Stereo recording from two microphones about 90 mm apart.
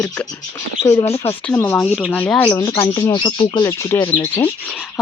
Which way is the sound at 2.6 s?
40° left (ahead or behind).